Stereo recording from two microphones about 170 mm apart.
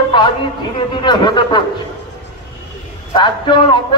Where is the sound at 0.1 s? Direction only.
25° left (ahead or behind).